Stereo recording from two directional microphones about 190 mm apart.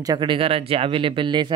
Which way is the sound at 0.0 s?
25° right (ahead or behind).